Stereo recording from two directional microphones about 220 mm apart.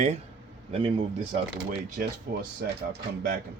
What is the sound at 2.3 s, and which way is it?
Speech, 45° right (ahead or behind).